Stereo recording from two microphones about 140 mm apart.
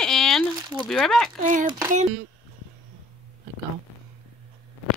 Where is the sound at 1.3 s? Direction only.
65° right (ahead or behind).